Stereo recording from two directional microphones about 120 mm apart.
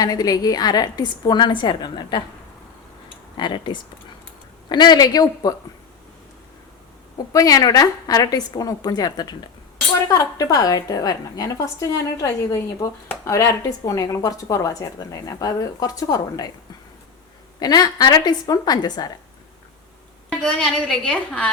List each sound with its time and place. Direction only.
0.0 s a woman's voice: 35° left (ahead or behind)
3.3 s a woman's voice: 40° left (ahead or behind)
7.3 s a woman's voice: 30° left (ahead or behind)
17.6 s a woman's voice: 35° left (ahead or behind)
20.4 s a woman's voice: 10° left (ahead or behind)